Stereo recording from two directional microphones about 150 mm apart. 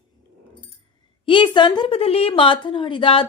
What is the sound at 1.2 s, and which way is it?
A woman's voice, 35° left (ahead or behind).